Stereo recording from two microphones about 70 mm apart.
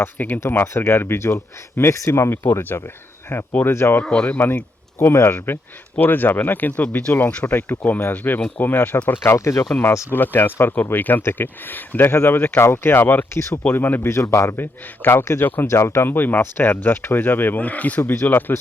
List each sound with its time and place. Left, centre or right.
0.0 s speech: left
0.4 s speech: left
4.0 s speech: centre
4.3 s speech: left
4.9 s speech: left
9.2 s speech: left
10.1 s speech: left
14.1 s speech: left